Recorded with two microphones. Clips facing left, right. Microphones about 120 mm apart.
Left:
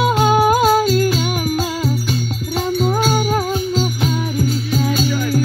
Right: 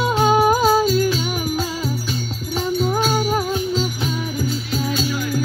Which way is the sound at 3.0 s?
Centre (ahead or behind).